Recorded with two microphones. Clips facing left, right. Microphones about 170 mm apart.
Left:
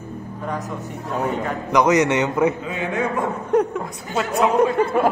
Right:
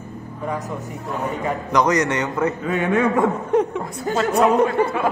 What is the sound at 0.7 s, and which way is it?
Speech, 35° left (ahead or behind).